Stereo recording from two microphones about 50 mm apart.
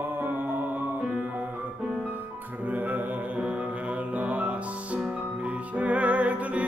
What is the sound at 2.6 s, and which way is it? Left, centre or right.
Music, right.